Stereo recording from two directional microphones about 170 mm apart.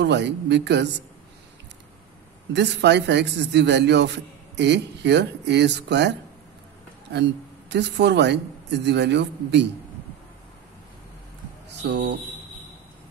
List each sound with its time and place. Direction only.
0.0 s a man's voice: 90° right
2.5 s a man's voice: 90° right
11.8 s a man's voice: 90° right